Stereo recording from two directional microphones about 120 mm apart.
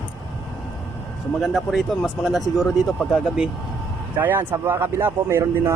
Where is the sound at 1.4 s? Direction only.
Centre (ahead or behind).